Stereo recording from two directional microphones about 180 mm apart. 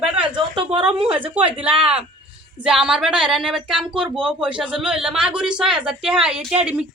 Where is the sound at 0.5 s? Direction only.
30° right (ahead or behind).